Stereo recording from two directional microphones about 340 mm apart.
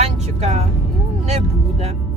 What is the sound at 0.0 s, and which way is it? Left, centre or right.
Music, centre.